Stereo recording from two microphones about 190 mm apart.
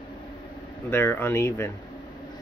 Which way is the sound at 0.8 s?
10° left (ahead or behind).